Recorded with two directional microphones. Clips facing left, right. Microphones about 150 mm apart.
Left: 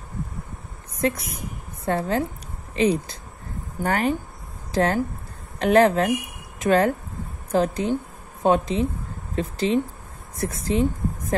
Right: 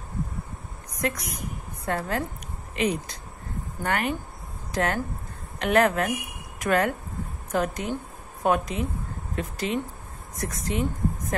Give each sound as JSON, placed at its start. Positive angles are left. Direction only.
{"t": 1.0, "sound": "a woman's voice", "side_deg": 30}